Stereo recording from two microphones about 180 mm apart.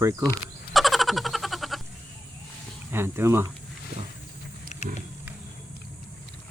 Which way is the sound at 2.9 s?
15° right (ahead or behind).